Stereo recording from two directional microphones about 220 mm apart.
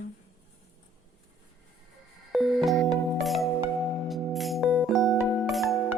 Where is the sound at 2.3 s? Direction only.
Centre (ahead or behind).